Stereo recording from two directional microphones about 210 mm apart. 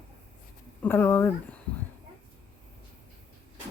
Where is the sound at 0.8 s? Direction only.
10° left (ahead or behind).